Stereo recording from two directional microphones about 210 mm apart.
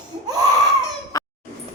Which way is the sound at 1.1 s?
15° left (ahead or behind).